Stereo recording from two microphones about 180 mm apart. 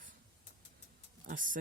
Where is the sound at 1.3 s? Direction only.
45° right (ahead or behind).